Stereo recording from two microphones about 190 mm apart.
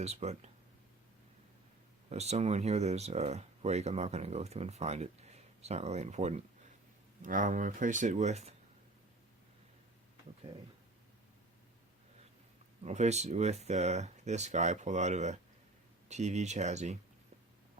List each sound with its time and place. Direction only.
0.0 s speech: 35° right (ahead or behind)
2.0 s speech: 35° right (ahead or behind)
12.8 s speech: 35° right (ahead or behind)